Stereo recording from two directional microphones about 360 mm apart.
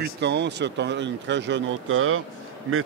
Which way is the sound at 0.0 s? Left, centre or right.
Right.